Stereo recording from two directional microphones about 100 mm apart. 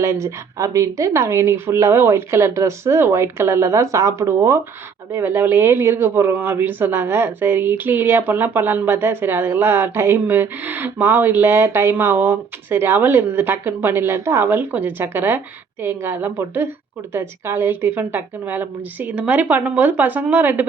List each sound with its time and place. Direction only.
0.0 s a woman's voice: 30° right (ahead or behind)